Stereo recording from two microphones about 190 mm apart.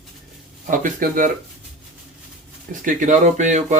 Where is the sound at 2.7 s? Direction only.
40° right (ahead or behind).